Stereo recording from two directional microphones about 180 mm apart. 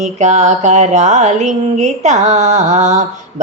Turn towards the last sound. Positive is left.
turn(degrees=-40)  # may be behind; listen again after turning